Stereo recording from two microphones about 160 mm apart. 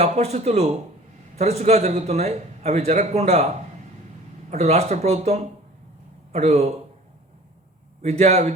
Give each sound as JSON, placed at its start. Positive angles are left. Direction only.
{"t": 0.0, "sound": "a man's voice", "side_deg": -45}
{"t": 4.5, "sound": "a man's voice", "side_deg": -45}
{"t": 8.0, "sound": "a man's voice", "side_deg": -45}